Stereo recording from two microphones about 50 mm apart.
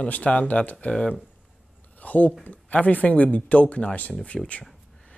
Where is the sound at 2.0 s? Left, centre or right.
Left.